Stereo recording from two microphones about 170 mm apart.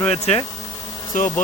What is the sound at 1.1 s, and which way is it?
Speech, 50° left (ahead or behind).